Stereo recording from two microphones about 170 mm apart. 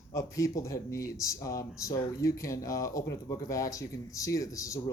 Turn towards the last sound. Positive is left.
turn(degrees=20)  # may be behind; listen again after turning